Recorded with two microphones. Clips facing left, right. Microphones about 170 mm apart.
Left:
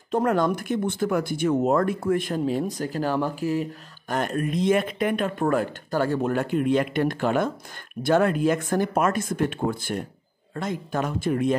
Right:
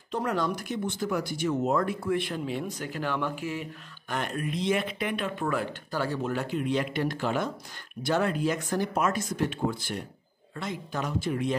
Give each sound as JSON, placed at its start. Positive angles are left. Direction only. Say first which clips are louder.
{"t": 0.1, "sound": "speech", "louder": "left 7 dB", "side_deg": 50}